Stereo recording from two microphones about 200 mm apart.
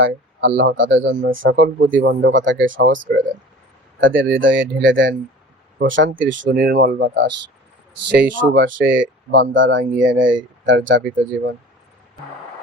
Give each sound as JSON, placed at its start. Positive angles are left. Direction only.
{"t": 0.0, "sound": "speech", "side_deg": -70}
{"t": 2.0, "sound": "speech", "side_deg": -50}
{"t": 2.6, "sound": "speech", "side_deg": -70}